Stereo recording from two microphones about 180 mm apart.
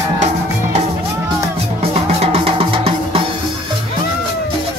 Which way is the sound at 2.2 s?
30° right (ahead or behind).